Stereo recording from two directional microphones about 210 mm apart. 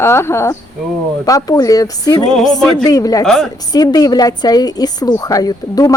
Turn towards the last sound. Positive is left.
turn(degrees=15)  # may be behind; listen again after turning